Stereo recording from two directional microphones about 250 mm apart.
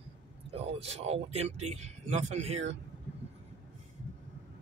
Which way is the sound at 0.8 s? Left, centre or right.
Right.